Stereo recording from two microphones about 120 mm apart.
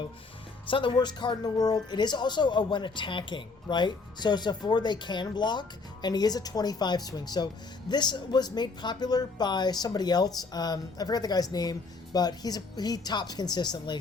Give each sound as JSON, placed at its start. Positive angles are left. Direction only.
{"t": 0.7, "sound": "speech", "side_deg": 45}